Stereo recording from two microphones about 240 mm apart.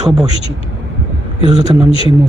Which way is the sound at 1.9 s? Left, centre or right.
Left.